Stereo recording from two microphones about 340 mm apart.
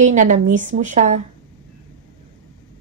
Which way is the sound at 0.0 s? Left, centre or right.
Right.